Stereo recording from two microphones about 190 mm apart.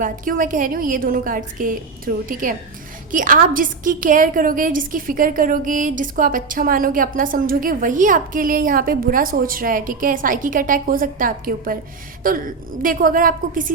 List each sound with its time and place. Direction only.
0.0 s a woman's voice: 45° right (ahead or behind)